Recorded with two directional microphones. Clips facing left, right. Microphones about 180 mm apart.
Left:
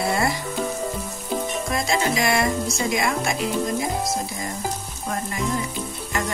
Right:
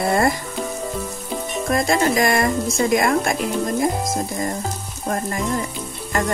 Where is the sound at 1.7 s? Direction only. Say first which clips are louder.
Right 6 dB; 50° right (ahead or behind).